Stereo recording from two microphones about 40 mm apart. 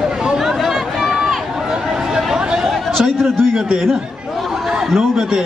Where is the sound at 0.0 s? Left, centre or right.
Centre.